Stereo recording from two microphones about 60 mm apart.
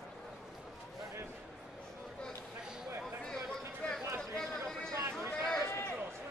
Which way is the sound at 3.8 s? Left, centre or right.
Centre.